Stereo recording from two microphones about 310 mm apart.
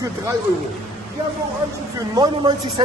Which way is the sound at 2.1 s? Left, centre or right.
Centre.